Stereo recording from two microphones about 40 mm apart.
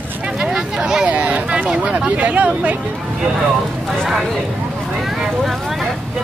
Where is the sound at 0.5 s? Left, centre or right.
Centre.